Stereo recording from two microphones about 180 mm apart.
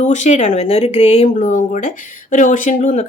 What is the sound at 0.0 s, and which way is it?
Speech, 40° left (ahead or behind).